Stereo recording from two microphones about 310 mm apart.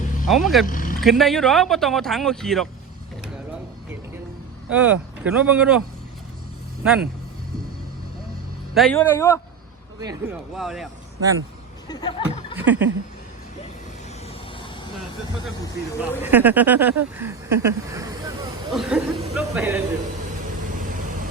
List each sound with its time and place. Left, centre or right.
0.3 s speech: centre
0.7 s vehicle: left
0.9 s speech: centre
4.7 s speech: centre
6.8 s speech: centre
8.7 s speech: centre
10.0 s speech: centre
10.5 s speech: centre
11.9 s speech: centre
12.5 s a sound: centre
16.0 s speech: centre
20.7 s vehicle: right